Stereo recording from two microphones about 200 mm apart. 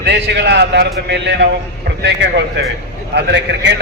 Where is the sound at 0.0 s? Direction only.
60° right (ahead or behind).